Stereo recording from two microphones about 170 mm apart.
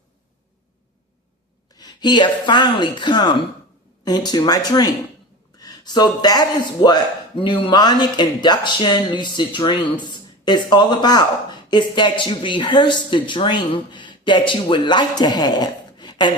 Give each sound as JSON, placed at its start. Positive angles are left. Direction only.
{"t": 1.7, "sound": "speech", "side_deg": 25}